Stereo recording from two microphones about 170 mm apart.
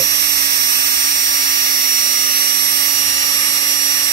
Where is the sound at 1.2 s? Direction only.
55° right (ahead or behind).